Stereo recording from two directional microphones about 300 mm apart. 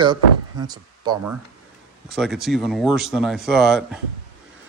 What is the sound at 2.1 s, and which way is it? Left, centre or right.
A man's voice, centre.